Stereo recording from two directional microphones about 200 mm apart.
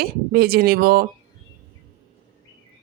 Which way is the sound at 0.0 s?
50° right (ahead or behind).